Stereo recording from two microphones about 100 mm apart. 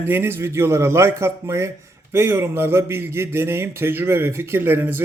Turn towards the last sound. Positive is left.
turn(degrees=-20)  # may be behind; listen again after turning